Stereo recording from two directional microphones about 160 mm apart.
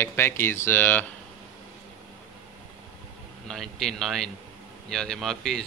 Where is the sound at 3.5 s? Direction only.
Centre (ahead or behind).